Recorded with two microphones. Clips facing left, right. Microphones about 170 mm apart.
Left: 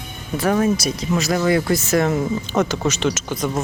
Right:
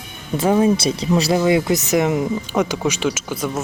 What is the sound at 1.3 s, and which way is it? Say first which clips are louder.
Speech: even; 20° right (ahead or behind).